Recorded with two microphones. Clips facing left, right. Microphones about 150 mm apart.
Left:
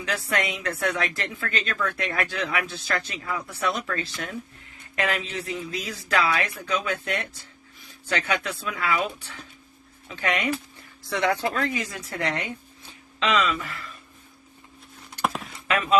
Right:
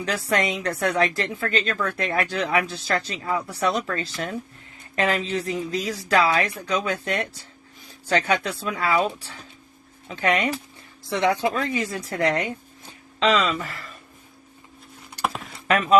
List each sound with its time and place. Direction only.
0.0 s a woman's voice: 35° right (ahead or behind)
6.3 s a woman's voice: 25° right (ahead or behind)
6.6 s a woman's voice: 35° right (ahead or behind)
11.1 s a woman's voice: 20° right (ahead or behind); by 13.8 s 40° right (ahead or behind)
15.6 s speech: 40° right (ahead or behind)